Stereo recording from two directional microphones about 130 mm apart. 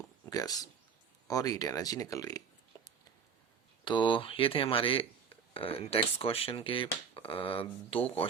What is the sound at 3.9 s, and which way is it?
Speech, 40° left (ahead or behind).